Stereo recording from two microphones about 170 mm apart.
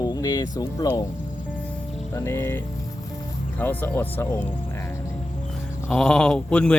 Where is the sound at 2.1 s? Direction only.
15° left (ahead or behind).